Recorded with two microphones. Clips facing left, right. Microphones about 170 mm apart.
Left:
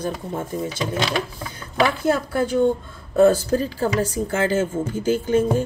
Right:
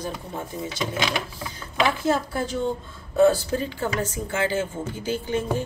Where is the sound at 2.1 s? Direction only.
55° left (ahead or behind).